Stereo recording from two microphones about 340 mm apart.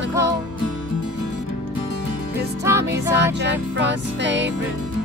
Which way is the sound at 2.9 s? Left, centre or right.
Right.